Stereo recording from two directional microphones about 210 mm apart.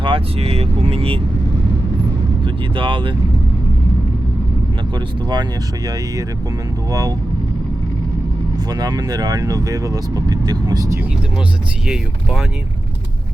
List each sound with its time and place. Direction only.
0.0 s speech: 25° right (ahead or behind)
2.4 s speech: 25° right (ahead or behind)
4.9 s speech: 20° right (ahead or behind)
8.5 s speech: 20° right (ahead or behind)
11.9 s speech: 5° right (ahead or behind)